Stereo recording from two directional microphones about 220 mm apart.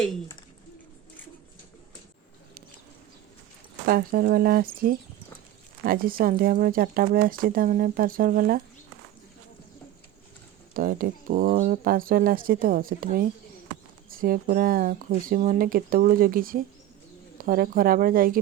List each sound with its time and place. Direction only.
3.8 s speech: 40° right (ahead or behind)
10.8 s speech: 40° right (ahead or behind)